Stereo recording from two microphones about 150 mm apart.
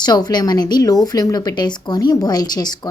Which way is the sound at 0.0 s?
25° left (ahead or behind).